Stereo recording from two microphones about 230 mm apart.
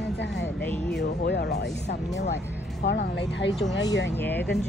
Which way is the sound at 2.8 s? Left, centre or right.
Left.